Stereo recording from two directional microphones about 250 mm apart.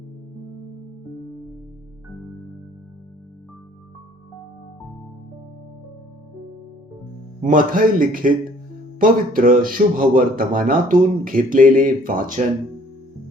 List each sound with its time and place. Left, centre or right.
7.4 s speech: right